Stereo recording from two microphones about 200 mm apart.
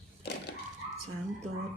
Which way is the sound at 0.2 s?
55° left (ahead or behind).